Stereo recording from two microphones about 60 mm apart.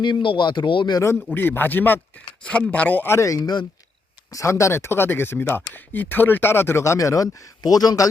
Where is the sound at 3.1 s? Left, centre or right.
Left.